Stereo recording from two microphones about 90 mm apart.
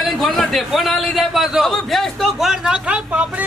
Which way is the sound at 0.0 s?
Centre (ahead or behind).